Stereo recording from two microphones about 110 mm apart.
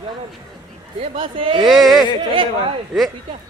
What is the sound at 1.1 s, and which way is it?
Speech, 50° right (ahead or behind).